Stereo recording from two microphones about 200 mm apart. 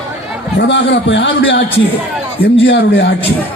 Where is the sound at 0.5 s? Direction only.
65° left (ahead or behind).